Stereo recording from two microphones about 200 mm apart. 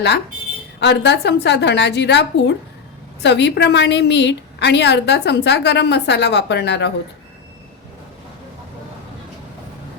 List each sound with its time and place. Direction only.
0.8 s a woman's voice: 60° left (ahead or behind)